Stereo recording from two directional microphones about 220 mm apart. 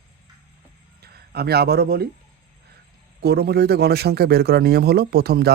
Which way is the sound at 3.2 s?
45° right (ahead or behind).